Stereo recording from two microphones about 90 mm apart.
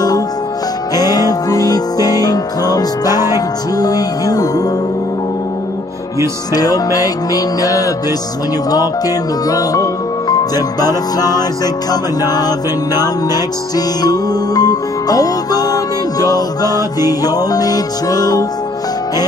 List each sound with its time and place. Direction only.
0.9 s music: 45° left (ahead or behind)
6.5 s music: 45° left (ahead or behind)